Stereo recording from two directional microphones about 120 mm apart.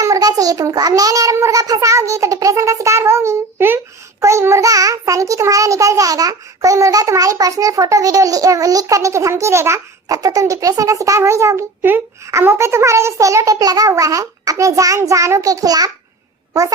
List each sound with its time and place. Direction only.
0.0 s a child's voice: 30° right (ahead or behind)